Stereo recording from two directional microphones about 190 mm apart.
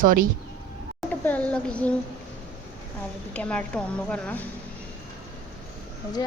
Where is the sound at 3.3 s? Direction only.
5° left (ahead or behind).